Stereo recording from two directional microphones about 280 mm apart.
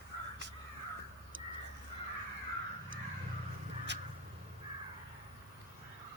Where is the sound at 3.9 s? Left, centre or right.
Right.